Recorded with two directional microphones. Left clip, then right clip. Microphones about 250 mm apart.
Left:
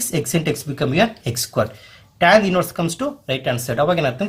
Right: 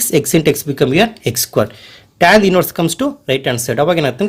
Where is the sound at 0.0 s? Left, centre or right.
Right.